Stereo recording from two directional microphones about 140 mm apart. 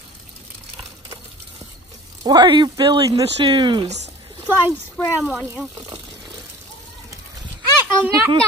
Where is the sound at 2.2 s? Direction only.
30° right (ahead or behind).